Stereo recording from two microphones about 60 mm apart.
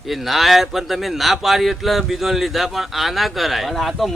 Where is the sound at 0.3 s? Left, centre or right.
Centre.